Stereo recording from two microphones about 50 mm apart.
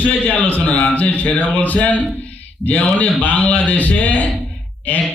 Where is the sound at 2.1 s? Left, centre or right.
Left.